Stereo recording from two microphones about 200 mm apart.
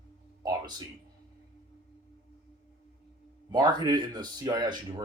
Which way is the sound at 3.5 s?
20° right (ahead or behind).